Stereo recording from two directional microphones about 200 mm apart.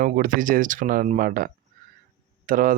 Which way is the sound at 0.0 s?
40° right (ahead or behind).